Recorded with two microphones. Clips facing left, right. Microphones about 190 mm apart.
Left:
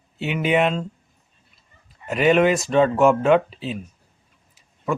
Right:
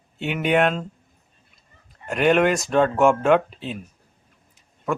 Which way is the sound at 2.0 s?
Centre (ahead or behind).